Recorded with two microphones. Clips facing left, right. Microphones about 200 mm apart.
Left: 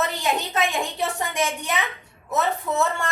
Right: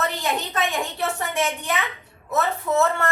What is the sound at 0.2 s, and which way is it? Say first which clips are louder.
A woman's voice: left 1 dB; 15° left (ahead or behind).